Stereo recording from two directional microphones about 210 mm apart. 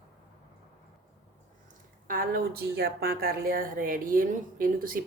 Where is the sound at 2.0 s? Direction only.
45° right (ahead or behind).